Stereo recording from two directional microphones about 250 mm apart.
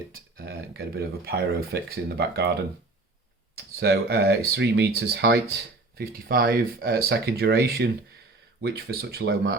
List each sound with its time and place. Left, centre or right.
0.1 s speech: right
3.8 s speech: right